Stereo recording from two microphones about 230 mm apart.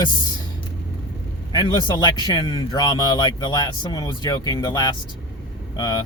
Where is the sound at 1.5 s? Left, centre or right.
Centre.